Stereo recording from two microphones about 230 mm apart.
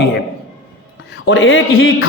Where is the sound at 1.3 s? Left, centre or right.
Left.